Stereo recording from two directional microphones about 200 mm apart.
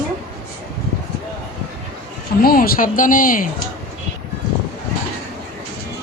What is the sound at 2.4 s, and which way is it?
Speech, 45° left (ahead or behind).